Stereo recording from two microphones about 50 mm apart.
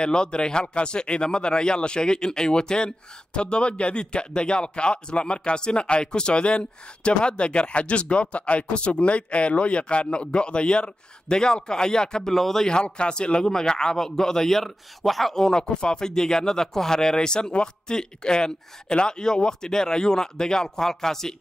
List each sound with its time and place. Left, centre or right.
0.0 s a man's voice: centre
12.6 s a man's voice: centre